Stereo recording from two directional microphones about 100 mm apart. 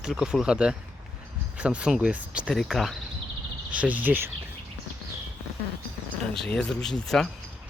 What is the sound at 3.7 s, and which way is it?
Speech, 15° right (ahead or behind).